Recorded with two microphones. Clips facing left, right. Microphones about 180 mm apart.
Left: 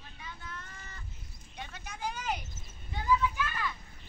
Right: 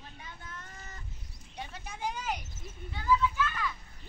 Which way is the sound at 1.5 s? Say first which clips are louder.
Right 2 dB; 30° right (ahead or behind).